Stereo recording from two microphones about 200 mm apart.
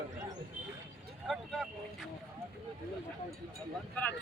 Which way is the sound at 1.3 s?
Centre (ahead or behind).